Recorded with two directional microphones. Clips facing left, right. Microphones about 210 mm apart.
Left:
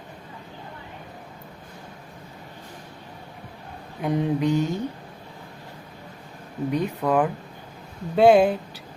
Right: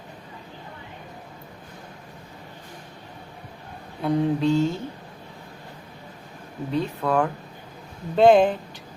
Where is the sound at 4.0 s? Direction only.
15° left (ahead or behind).